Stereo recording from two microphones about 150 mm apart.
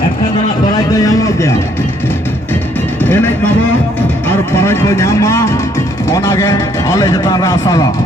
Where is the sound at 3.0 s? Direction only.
15° left (ahead or behind).